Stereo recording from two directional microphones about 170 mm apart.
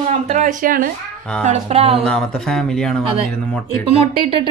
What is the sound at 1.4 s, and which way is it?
Speech, 40° right (ahead or behind).